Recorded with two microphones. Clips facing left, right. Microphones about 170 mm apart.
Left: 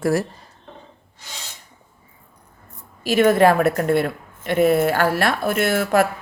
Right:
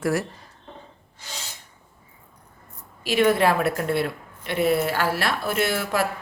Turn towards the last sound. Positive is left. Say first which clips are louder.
# left 6 dB
turn(degrees=50)  # may be behind; listen again after turning